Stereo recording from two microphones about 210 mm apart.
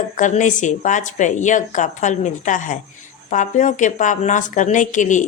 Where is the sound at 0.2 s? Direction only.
35° left (ahead or behind).